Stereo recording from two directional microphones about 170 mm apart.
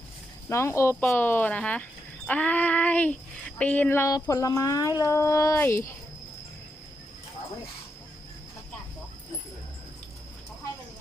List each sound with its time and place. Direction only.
0.4 s speech: 15° left (ahead or behind)